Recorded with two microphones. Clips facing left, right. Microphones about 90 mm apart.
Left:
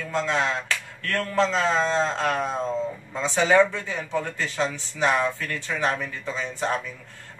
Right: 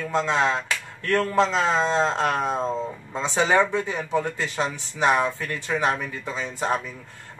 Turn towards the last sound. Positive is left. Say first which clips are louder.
# right 1 dB
turn(degrees=-15)  # may be behind; listen again after turning